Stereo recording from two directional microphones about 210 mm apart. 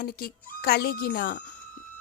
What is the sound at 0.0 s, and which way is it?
Speech, 45° left (ahead or behind).